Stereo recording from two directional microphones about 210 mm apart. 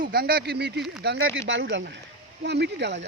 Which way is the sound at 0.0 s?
45° right (ahead or behind).